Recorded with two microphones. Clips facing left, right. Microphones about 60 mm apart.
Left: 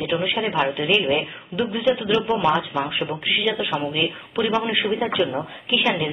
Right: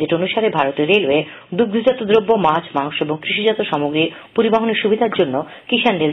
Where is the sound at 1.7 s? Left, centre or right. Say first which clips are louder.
Right 5 dB; right.